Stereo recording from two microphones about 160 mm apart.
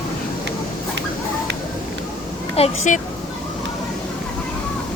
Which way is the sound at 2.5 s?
45° left (ahead or behind).